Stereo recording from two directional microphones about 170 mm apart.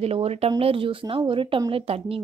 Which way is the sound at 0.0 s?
35° right (ahead or behind).